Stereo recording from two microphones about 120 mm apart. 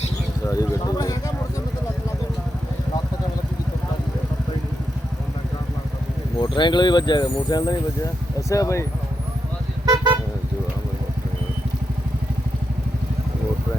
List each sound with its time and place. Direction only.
0.4 s speech: 30° left (ahead or behind)
6.4 s speech: 40° left (ahead or behind)
9.8 s vehicle: 35° right (ahead or behind)